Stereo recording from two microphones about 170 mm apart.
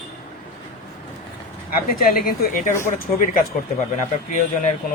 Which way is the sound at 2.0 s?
60° left (ahead or behind).